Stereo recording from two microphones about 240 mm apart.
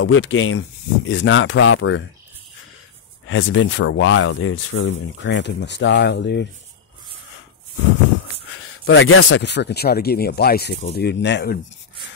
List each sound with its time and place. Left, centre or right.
0.0 s speech: left
3.3 s speech: left
8.8 s speech: left